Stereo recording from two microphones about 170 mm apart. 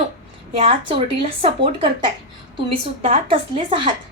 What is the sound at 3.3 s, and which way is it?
Speech, 30° right (ahead or behind).